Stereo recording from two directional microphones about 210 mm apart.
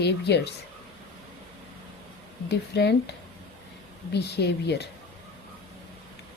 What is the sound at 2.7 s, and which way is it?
Speech, 55° left (ahead or behind).